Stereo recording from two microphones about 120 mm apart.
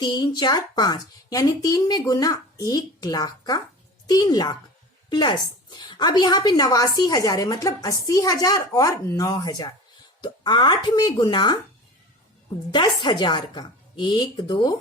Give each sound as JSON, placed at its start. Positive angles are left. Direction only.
{"t": 0.0, "sound": "a woman's voice", "side_deg": 35}
{"t": 12.7, "sound": "a woman's voice", "side_deg": 40}